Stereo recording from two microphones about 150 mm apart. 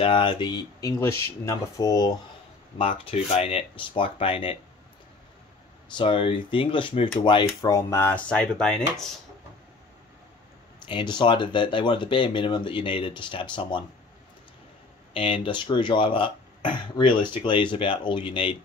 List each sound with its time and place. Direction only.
0.0 s speech: 35° left (ahead or behind)
2.8 s speech: 40° left (ahead or behind)
5.9 s speech: 35° left (ahead or behind); by 9.0 s 5° left (ahead or behind)
10.9 s speech: 30° left (ahead or behind)
15.1 s speech: 35° left (ahead or behind)